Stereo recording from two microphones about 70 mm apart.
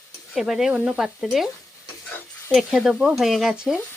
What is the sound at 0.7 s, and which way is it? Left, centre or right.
Speech, centre.